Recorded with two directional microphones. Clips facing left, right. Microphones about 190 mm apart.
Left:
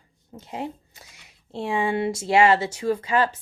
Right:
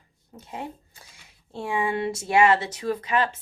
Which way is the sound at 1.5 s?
25° left (ahead or behind).